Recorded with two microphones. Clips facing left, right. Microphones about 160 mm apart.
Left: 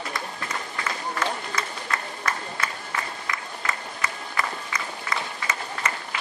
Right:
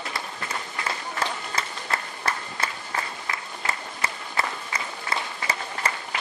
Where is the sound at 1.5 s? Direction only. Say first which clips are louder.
Even; 30° right (ahead or behind).